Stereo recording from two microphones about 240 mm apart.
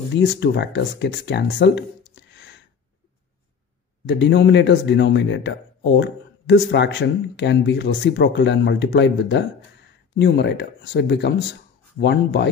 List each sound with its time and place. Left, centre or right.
0.1 s speech: left
2.3 s a sound: left
4.1 s speech: left